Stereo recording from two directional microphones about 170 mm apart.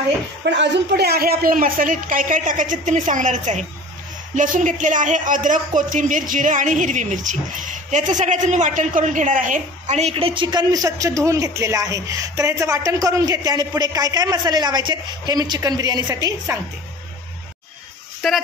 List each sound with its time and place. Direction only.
0.5 s a woman's voice: 80° right; by 16.5 s 20° right (ahead or behind)